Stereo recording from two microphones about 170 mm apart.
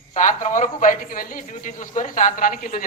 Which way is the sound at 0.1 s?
45° left (ahead or behind).